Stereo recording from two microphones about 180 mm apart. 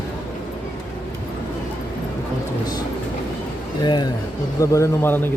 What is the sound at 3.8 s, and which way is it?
Speech, 25° left (ahead or behind).